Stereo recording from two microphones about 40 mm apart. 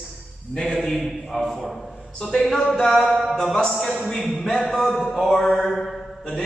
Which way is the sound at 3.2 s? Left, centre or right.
Centre.